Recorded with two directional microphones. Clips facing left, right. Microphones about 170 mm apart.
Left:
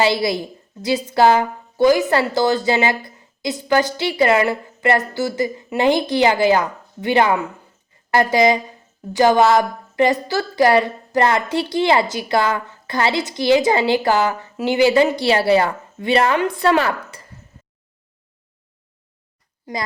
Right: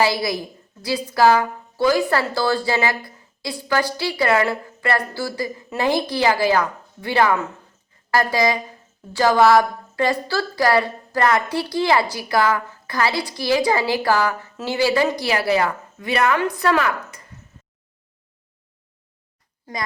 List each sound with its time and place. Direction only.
0.0 s a woman's voice: 25° left (ahead or behind)